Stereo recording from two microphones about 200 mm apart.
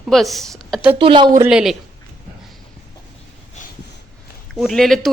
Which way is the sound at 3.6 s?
35° left (ahead or behind).